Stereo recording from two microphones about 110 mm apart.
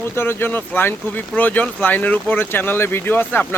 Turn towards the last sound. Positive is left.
turn(degrees=15)  # may be behind; listen again after turning